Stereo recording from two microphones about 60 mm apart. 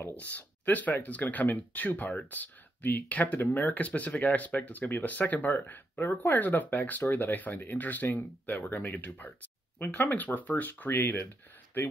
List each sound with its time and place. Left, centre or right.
0.4 s speech: left